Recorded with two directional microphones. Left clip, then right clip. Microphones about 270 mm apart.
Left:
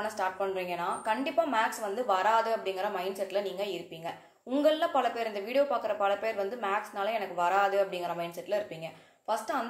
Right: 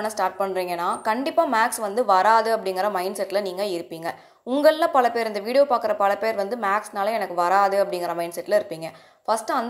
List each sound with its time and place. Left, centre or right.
0.0 s a woman's voice: right